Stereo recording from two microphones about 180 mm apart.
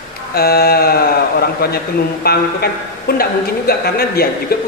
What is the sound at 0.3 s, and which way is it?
A man's voice, 60° left (ahead or behind).